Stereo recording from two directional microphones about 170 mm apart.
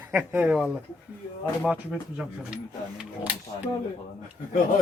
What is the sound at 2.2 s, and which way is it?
Speech, 5° right (ahead or behind).